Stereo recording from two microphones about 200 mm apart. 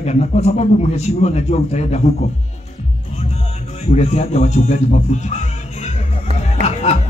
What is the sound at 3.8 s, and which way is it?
Speech, 35° left (ahead or behind).